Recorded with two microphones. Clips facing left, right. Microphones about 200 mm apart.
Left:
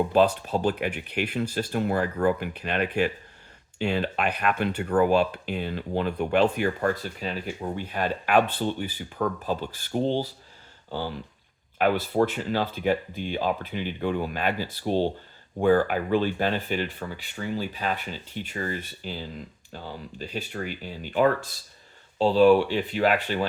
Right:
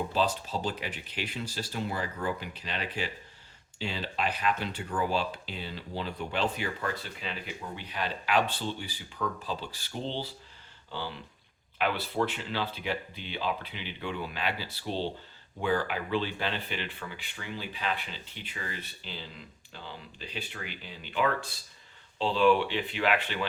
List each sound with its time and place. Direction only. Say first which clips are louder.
0.1 s speech: left 8 dB; 60° left (ahead or behind); by 23.5 s 40° left (ahead or behind)